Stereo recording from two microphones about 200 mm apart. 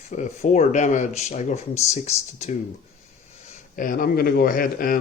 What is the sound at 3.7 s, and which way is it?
Speech, 45° left (ahead or behind).